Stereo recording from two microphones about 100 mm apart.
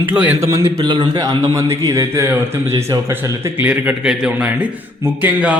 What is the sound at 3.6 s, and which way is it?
A man's voice, 15° right (ahead or behind).